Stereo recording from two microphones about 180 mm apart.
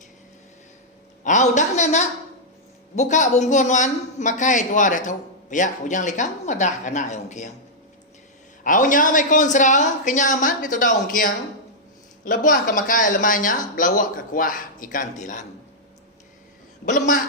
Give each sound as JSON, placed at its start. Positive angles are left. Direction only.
{"t": 1.2, "sound": "a woman's voice", "side_deg": 45}
{"t": 8.6, "sound": "a man's voice", "side_deg": 45}
{"t": 16.8, "sound": "a man's voice", "side_deg": 45}